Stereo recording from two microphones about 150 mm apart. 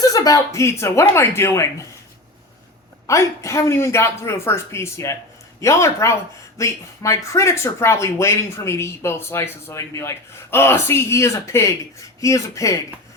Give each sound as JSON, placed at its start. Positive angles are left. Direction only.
{"t": 0.1, "sound": "speech", "side_deg": 25}
{"t": 3.1, "sound": "speech", "side_deg": 20}